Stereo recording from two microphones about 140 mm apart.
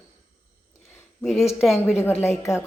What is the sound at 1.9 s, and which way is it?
Speech, 15° left (ahead or behind).